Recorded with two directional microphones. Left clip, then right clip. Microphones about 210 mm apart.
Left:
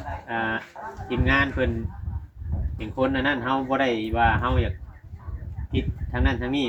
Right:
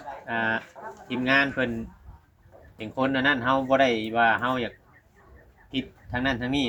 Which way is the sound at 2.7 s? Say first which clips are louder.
Left 1 dB; 50° right (ahead or behind).